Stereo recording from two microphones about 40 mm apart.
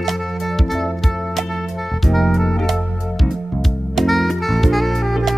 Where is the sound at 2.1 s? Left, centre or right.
Centre.